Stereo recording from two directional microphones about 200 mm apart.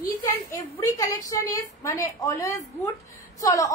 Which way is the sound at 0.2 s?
15° left (ahead or behind).